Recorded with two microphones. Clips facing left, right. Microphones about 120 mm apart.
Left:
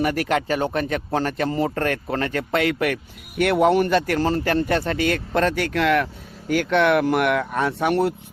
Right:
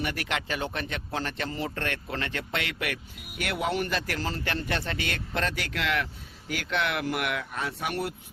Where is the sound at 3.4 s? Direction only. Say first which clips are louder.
Left 12 dB; 55° left (ahead or behind).